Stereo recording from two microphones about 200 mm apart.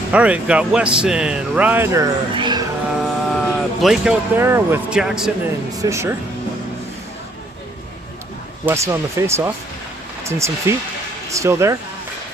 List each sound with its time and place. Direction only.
0.1 s speech: 5° right (ahead or behind); by 2.6 s 20° right (ahead or behind)
2.9 s speech: centre (ahead or behind)
5.8 s speech: 15° right (ahead or behind)
8.6 s speech: 15° right (ahead or behind)